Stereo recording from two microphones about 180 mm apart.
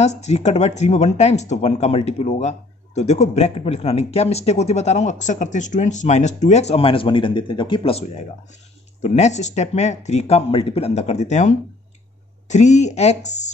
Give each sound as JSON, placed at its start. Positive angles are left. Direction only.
{"t": 0.0, "sound": "speech", "side_deg": 40}